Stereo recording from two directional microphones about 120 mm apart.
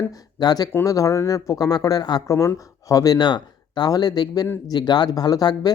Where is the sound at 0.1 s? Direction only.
35° left (ahead or behind).